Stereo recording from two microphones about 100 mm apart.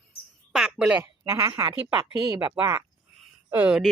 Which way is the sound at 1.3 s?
35° right (ahead or behind).